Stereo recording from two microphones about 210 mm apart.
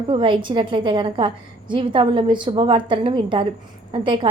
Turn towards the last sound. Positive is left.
turn(degrees=-25)  # may be behind; listen again after turning